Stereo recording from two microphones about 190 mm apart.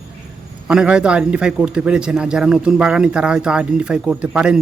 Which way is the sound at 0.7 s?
5° right (ahead or behind).